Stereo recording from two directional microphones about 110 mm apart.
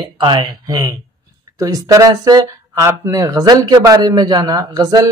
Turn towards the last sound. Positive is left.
turn(degrees=-35)  # may be behind; listen again after turning